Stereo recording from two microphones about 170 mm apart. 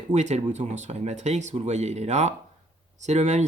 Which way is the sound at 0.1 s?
40° right (ahead or behind).